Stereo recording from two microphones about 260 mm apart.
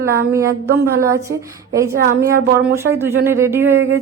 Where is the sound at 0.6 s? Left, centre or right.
Right.